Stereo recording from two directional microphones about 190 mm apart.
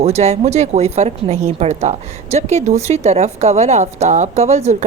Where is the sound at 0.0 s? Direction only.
35° right (ahead or behind).